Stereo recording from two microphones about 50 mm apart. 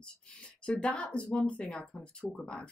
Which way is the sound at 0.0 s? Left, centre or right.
Centre.